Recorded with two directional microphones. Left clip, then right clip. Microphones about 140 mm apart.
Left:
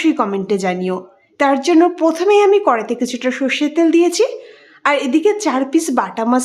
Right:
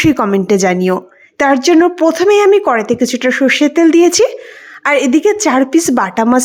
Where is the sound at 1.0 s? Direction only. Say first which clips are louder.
Right 3 dB; 40° right (ahead or behind).